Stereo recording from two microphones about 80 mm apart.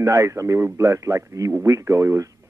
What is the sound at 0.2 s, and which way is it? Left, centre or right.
A man's voice, right.